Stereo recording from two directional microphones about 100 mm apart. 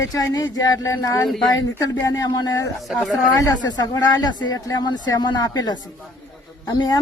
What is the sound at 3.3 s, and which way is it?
Speech, 40° left (ahead or behind).